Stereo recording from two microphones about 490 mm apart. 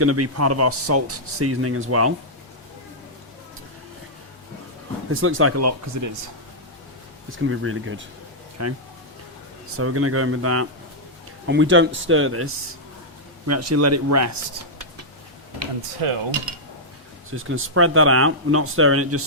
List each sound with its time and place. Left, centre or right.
0.0 s speech: right
5.1 s speech: right
7.3 s speech: right
13.5 s speech: right
16.0 s mechanisms: right
17.3 s speech: right